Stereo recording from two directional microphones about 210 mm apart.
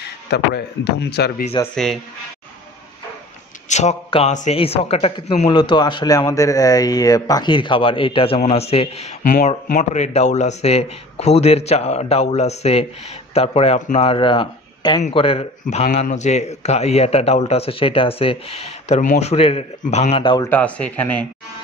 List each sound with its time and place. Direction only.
0.0 s speech: 50° left (ahead or behind)
3.6 s a man's voice: 35° left (ahead or behind)
20.4 s speech: 5° left (ahead or behind)